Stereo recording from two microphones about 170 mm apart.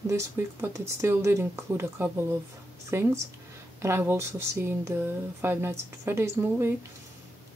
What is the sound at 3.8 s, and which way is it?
Speech, 15° right (ahead or behind).